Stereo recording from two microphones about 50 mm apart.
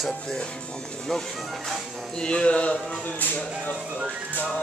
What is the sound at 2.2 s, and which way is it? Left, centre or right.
Speech, centre.